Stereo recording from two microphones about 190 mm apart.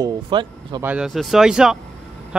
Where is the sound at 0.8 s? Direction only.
5° right (ahead or behind).